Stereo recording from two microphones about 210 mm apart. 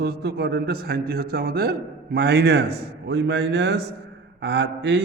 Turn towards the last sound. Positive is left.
turn(degrees=-50)  # may be behind; listen again after turning